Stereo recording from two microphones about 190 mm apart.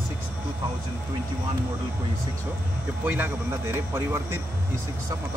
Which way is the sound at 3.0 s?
10° right (ahead or behind).